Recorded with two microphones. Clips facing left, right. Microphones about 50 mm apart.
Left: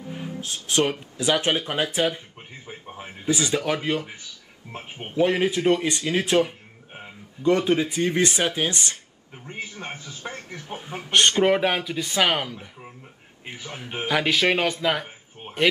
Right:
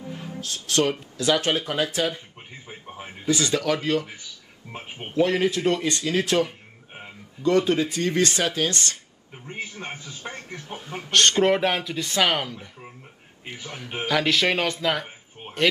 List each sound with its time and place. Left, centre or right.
0.1 s speech: left
2.6 s a man's voice: centre
3.3 s speech: centre
4.7 s speech: centre
5.1 s speech: centre
9.3 s a man's voice: centre
10.5 s speech: centre